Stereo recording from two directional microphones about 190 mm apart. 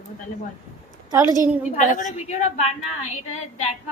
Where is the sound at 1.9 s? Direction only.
40° left (ahead or behind).